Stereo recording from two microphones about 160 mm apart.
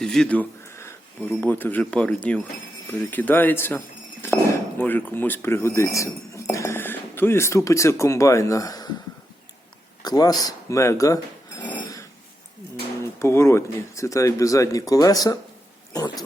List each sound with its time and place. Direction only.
0.0 s speech: 5° left (ahead or behind); by 8.9 s 20° left (ahead or behind)
10.0 s speech: 25° left (ahead or behind)
13.1 s speech: 15° left (ahead or behind)